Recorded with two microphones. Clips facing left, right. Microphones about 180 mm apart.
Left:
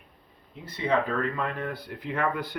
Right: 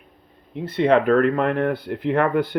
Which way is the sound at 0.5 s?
65° right (ahead or behind).